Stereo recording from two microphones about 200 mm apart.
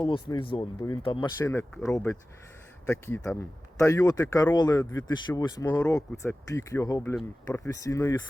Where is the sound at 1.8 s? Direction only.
15° left (ahead or behind).